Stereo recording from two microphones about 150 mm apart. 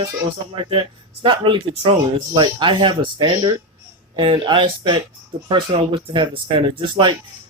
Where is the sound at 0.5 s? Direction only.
35° right (ahead or behind).